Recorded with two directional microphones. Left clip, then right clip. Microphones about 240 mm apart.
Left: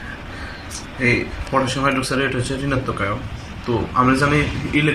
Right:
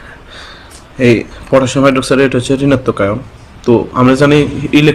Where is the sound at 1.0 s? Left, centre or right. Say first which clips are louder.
Right 8 dB; right.